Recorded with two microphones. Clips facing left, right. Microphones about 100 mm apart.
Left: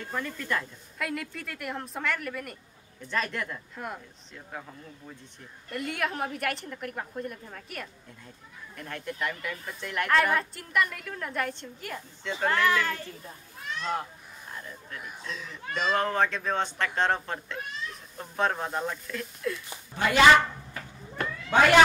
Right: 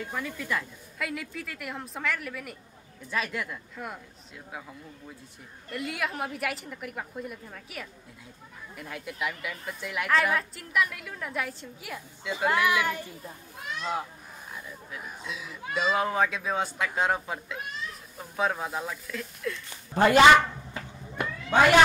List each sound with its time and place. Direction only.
0.0 s speech: 5° right (ahead or behind)
5.7 s speech: centre (ahead or behind)
19.9 s speech: 40° right (ahead or behind)
20.7 s a sound: 15° right (ahead or behind)